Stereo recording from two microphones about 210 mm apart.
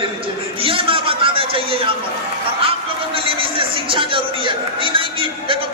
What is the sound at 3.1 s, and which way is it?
A man's voice, 25° right (ahead or behind).